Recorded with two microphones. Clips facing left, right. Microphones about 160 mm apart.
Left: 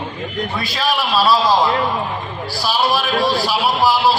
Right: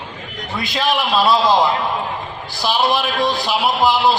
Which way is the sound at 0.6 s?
20° right (ahead or behind).